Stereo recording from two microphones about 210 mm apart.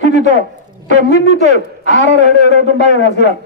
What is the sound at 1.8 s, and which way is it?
A man's voice, 60° left (ahead or behind).